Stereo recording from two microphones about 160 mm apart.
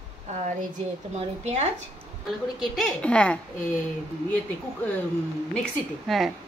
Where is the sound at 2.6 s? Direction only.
5° left (ahead or behind).